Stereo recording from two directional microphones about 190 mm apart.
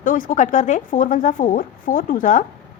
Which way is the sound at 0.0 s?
45° left (ahead or behind).